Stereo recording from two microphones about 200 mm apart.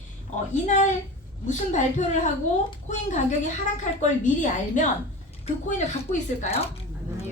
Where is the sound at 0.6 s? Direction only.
40° left (ahead or behind).